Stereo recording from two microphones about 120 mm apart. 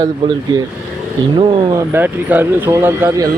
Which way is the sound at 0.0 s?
35° right (ahead or behind).